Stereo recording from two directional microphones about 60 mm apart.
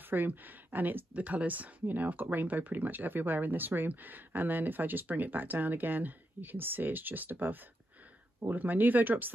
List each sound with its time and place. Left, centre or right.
0.1 s speech: right